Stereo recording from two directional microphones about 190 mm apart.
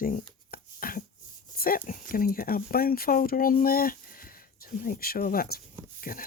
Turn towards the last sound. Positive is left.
turn(degrees=50)  # may be behind; listen again after turning